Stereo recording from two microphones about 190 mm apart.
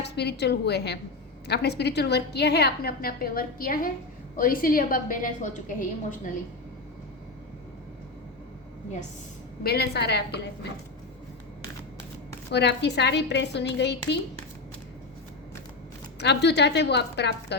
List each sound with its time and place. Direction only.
0.0 s a woman's voice: 60° left (ahead or behind); by 6.1 s 45° left (ahead or behind)
9.6 s a woman's voice: 55° left (ahead or behind)
12.5 s a woman's voice: 60° left (ahead or behind)
16.1 s a woman's voice: 65° left (ahead or behind)